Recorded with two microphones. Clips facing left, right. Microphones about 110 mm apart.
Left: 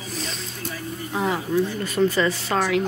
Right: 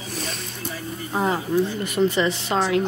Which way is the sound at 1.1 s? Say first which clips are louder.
Right 2 dB; 30° right (ahead or behind).